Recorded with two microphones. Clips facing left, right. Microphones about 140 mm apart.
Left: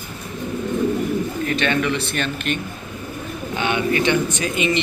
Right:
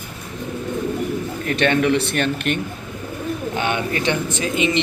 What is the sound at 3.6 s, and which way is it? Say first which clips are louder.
Speech: left 5 dB; 40° right (ahead or behind).